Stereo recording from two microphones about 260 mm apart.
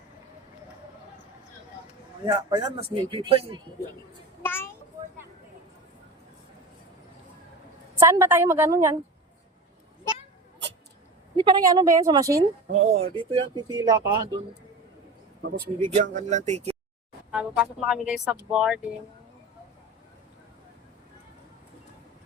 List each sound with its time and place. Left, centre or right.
2.2 s speech: centre
4.4 s a sound: centre
7.9 s speech: centre
11.3 s speech: centre
15.4 s speech: right
17.3 s speech: centre